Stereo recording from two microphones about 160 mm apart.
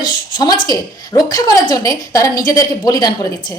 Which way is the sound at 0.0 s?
25° left (ahead or behind).